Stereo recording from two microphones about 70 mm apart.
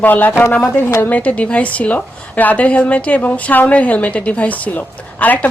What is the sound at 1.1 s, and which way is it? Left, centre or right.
A woman's voice, centre.